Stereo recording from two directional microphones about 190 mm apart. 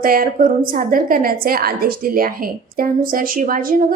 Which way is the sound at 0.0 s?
50° right (ahead or behind).